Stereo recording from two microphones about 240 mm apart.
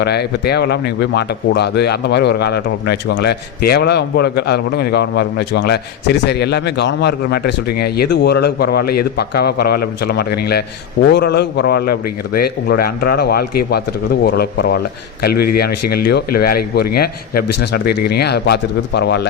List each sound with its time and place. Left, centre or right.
0.0 s speech: left